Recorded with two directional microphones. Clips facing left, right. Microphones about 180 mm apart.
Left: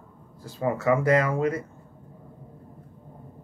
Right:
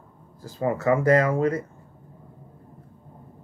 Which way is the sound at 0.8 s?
30° right (ahead or behind).